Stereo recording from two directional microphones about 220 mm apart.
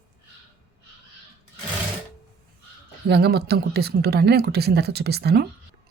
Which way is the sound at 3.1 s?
45° right (ahead or behind).